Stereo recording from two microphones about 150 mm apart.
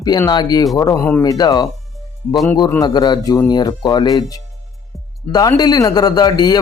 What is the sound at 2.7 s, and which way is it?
A man's voice, 25° left (ahead or behind).